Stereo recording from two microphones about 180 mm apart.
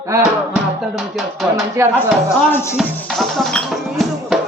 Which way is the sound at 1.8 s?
15° right (ahead or behind).